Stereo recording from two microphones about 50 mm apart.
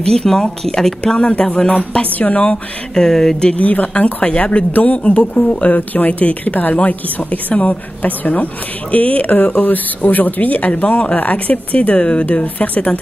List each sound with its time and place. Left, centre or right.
0.0 s speech: centre
1.0 s speech: left
3.5 s speech: left